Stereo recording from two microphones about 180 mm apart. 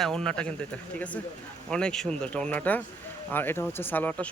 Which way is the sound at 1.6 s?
5° left (ahead or behind).